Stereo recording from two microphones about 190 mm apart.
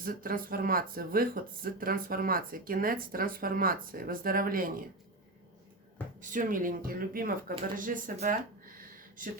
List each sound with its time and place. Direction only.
0.0 s speech: 50° right (ahead or behind)
6.1 s speech: 45° right (ahead or behind)
7.8 s a sound: 45° right (ahead or behind)